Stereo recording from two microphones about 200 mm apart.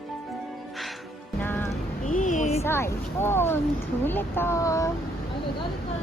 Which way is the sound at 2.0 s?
40° left (ahead or behind).